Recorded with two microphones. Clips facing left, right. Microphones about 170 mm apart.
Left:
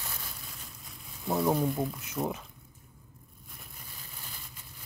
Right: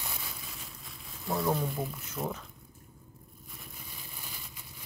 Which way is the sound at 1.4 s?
5° left (ahead or behind).